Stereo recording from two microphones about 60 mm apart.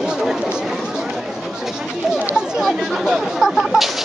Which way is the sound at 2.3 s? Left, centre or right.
Centre.